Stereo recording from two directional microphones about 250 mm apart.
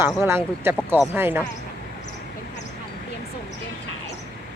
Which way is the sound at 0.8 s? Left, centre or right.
Centre.